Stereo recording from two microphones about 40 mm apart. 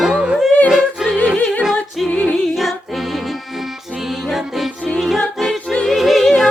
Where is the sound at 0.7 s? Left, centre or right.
Centre.